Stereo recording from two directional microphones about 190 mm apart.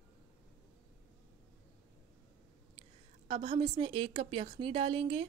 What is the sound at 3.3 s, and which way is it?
A woman's voice, 30° right (ahead or behind).